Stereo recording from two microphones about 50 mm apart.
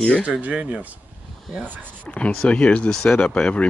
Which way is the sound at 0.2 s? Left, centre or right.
Right.